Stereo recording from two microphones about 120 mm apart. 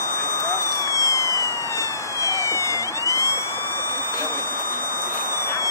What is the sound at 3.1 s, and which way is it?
Vehicle, 25° left (ahead or behind).